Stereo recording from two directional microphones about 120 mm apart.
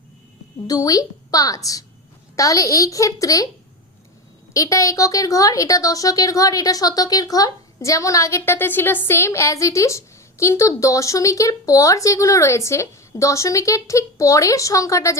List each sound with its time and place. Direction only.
0.7 s a woman's voice: 30° left (ahead or behind)
4.5 s a woman's voice: 30° left (ahead or behind)